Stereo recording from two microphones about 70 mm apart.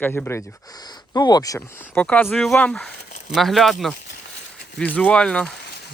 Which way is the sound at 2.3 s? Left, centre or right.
Centre.